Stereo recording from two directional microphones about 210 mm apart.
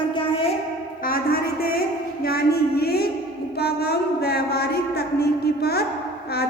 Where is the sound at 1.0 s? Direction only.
45° left (ahead or behind).